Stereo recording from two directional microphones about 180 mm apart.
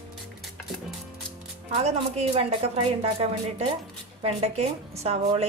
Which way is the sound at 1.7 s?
35° right (ahead or behind).